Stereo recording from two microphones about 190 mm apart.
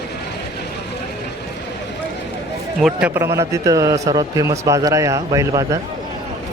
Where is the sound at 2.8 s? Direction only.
10° right (ahead or behind).